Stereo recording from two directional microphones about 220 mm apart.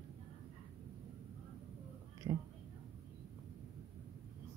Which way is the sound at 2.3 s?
15° right (ahead or behind).